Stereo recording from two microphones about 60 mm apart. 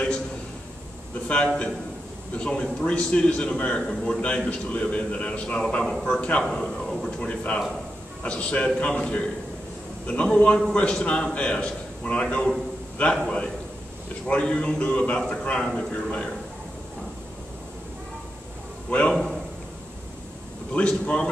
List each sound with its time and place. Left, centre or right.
1.2 s a man's voice: centre
7.1 s a man's voice: centre
14.2 s a man's voice: centre
18.9 s a man's voice: centre
19.1 s a sound: centre
20.7 s a man's voice: centre